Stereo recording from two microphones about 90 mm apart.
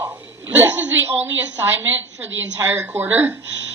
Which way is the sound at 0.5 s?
25° right (ahead or behind).